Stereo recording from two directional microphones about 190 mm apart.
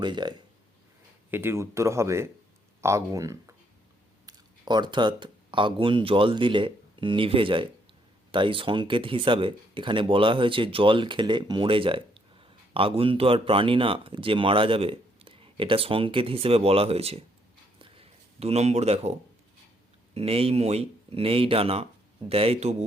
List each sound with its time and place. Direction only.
0.0 s speech: 25° right (ahead or behind)
1.3 s speech: 10° right (ahead or behind); by 17.2 s 30° right (ahead or behind)
17.7 s a sound: 30° right (ahead or behind)
20.1 s speech: 30° right (ahead or behind)